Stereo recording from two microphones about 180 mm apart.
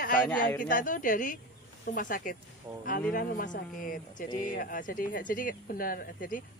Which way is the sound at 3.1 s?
50° left (ahead or behind).